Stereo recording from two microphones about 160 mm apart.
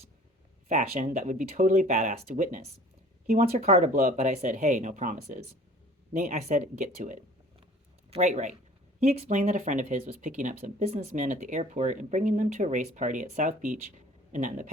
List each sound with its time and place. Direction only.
0.7 s speech: 50° right (ahead or behind)
3.8 s speech: 50° right (ahead or behind)
6.1 s speech: 50° right (ahead or behind)